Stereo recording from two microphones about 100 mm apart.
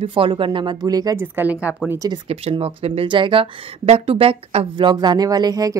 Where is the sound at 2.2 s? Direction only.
75° right (ahead or behind).